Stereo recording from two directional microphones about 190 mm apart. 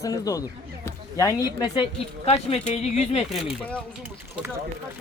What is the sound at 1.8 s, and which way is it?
Speech, 30° left (ahead or behind).